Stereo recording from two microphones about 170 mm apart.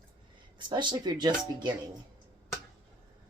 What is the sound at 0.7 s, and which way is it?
Speech, 25° right (ahead or behind).